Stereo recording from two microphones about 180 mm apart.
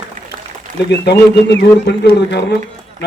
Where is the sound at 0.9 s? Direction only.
70° left (ahead or behind).